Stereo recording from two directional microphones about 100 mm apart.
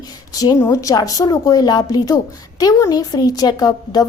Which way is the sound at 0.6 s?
25° left (ahead or behind).